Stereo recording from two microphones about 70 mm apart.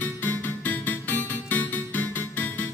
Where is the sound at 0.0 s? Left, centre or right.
Left.